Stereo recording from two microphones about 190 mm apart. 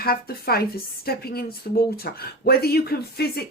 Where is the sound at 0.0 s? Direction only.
55° left (ahead or behind).